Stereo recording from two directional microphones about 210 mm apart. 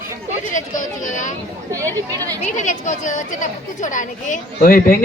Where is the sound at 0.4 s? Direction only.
35° left (ahead or behind).